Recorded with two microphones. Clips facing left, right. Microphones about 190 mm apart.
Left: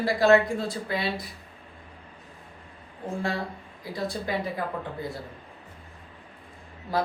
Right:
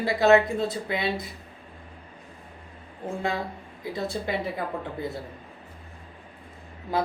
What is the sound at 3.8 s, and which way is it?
Speech, 25° right (ahead or behind).